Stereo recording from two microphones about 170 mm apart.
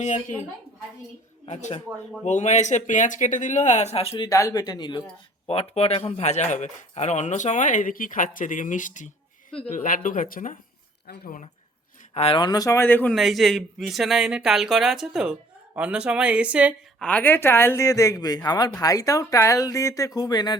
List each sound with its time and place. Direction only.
0.0 s speech: 45° left (ahead or behind)
1.5 s speech: 40° left (ahead or behind)
4.3 s speech: 20° left (ahead or behind); by 11.3 s 65° left (ahead or behind)
12.1 s speech: 35° left (ahead or behind); by 13.1 s 10° left (ahead or behind)
13.1 s speech: centre (ahead or behind)
17.0 s speech: 10° left (ahead or behind); by 20.6 s 25° left (ahead or behind)